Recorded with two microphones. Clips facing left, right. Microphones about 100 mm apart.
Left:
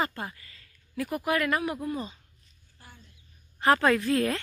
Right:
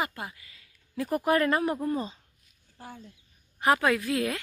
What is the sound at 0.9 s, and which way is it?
Speech, 35° right (ahead or behind).